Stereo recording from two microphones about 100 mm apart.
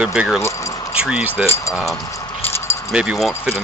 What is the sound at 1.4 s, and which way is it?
Speech, 25° left (ahead or behind).